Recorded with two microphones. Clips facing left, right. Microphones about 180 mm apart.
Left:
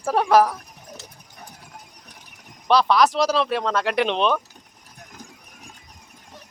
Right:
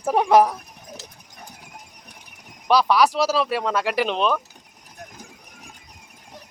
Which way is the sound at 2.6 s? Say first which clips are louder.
Even; 10° right (ahead or behind).